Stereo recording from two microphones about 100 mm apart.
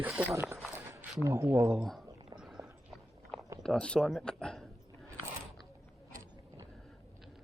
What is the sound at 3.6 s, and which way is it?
Speech, 5° left (ahead or behind).